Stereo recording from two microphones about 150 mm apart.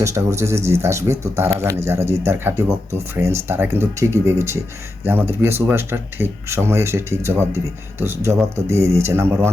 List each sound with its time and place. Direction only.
0.0 s speech: 20° right (ahead or behind)